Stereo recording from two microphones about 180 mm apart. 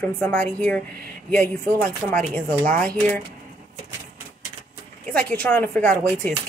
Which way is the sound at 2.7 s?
5° left (ahead or behind).